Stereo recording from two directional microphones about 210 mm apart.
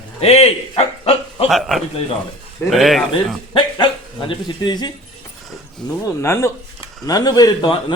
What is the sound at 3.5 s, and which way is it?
A man's voice, 20° left (ahead or behind).